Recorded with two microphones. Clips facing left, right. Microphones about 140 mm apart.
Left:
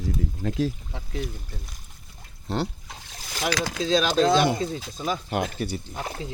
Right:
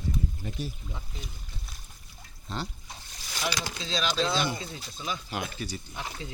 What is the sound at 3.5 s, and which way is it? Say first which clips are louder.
Speech: left 7 dB; 90° left.